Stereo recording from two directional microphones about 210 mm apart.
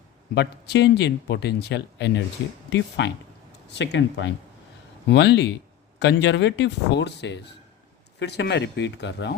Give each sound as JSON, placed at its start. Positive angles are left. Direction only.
{"t": 0.3, "sound": "speech", "side_deg": 55}